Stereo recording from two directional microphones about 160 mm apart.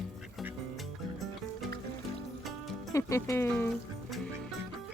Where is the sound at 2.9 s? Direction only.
20° left (ahead or behind).